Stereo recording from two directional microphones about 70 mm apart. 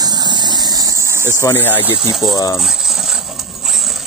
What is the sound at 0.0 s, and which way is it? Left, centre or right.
Engine, right.